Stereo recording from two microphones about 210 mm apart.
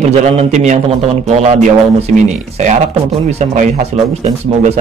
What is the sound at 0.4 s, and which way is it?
Speech, 30° right (ahead or behind).